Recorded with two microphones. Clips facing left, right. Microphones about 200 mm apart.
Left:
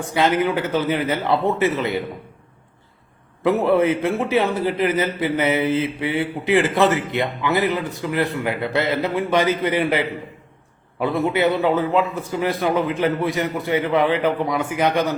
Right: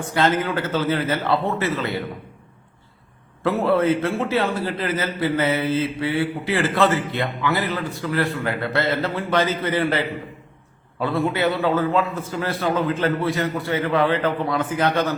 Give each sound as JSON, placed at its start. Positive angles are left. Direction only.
{"t": 0.1, "sound": "a man's voice", "side_deg": 15}
{"t": 3.4, "sound": "a man's voice", "side_deg": 15}